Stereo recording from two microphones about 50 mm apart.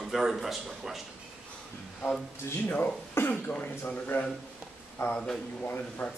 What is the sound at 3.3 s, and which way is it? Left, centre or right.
Speech, left.